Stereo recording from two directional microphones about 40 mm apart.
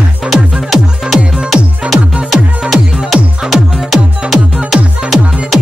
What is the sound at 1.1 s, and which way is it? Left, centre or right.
Music, right.